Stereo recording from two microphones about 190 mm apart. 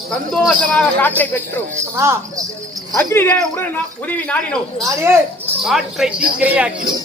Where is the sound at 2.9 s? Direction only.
15° left (ahead or behind).